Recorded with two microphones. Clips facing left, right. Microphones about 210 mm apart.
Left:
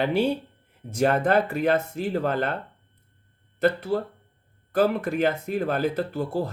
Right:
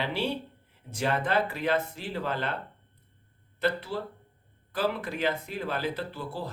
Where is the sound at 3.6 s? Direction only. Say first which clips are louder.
Left 7 dB; 45° left (ahead or behind).